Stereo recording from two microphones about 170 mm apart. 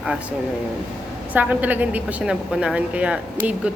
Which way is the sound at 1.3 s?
10° right (ahead or behind).